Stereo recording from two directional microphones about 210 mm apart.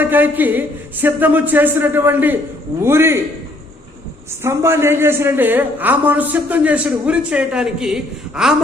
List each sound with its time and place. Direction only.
0.0 s a man's voice: 10° right (ahead or behind)
4.4 s a man's voice: 10° right (ahead or behind)